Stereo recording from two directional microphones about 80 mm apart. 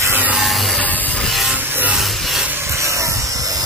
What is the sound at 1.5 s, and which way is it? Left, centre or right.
Music, right.